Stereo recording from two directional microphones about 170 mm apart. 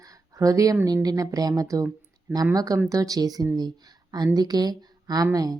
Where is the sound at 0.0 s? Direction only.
20° right (ahead or behind).